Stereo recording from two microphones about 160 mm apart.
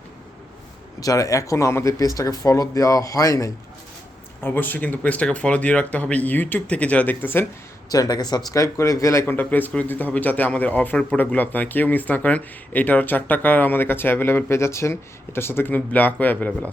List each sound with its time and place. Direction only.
0.9 s speech: 20° left (ahead or behind)
7.9 s speech: 25° left (ahead or behind)